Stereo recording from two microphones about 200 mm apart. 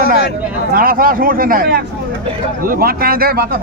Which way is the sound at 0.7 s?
45° right (ahead or behind).